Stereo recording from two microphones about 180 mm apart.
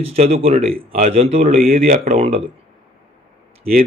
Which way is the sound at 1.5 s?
55° right (ahead or behind).